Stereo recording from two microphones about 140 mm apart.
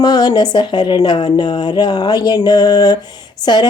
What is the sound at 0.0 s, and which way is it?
Speech, 30° left (ahead or behind).